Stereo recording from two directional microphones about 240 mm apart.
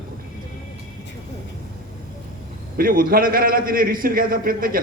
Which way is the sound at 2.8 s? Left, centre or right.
Right.